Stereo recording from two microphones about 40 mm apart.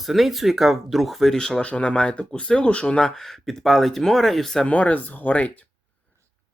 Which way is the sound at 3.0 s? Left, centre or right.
Centre.